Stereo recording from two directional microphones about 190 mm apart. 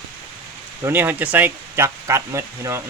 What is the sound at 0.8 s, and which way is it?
Speech, 10° right (ahead or behind).